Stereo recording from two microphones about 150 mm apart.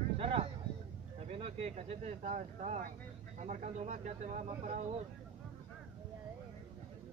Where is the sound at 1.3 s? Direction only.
40° right (ahead or behind).